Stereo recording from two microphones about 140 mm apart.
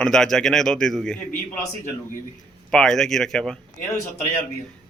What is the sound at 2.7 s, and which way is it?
Speech, 5° left (ahead or behind).